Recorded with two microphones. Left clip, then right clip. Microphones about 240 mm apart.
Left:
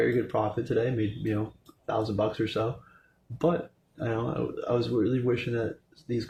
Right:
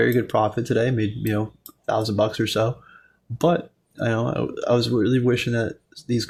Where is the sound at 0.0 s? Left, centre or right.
Right.